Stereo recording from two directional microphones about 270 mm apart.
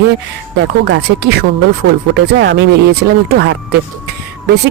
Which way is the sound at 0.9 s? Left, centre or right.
Right.